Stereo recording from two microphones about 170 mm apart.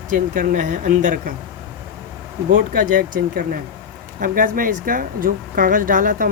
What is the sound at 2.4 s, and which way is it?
Speech, 55° right (ahead or behind).